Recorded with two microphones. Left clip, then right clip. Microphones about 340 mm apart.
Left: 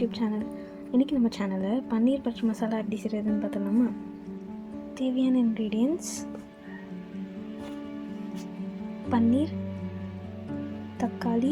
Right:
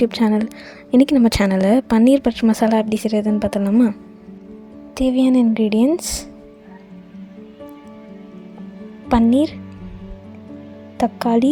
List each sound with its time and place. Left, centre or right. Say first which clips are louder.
0.0 s a woman's voice: right 12 dB; right
4.9 s a woman's voice: right 11 dB; right
9.0 s a woman's voice: right 10 dB; right
10.9 s a woman's voice: right 12 dB; right